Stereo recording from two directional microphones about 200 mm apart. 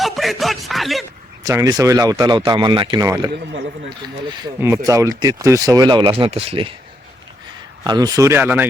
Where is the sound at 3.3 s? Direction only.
55° right (ahead or behind).